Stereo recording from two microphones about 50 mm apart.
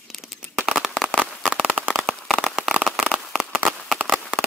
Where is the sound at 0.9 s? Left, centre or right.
Centre.